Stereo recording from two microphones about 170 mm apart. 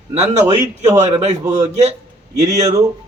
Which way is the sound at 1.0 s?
40° right (ahead or behind).